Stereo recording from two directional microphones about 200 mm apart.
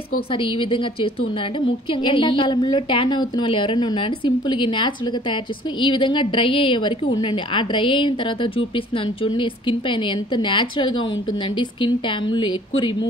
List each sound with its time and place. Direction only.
0.3 s a woman's voice: 25° left (ahead or behind)